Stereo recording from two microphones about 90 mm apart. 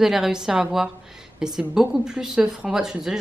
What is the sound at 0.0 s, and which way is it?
A woman's voice, 5° right (ahead or behind).